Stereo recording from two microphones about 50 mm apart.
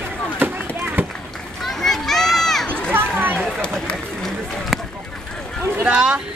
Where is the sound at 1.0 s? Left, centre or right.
Right.